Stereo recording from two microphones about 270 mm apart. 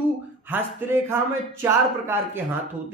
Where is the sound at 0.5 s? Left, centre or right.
Centre.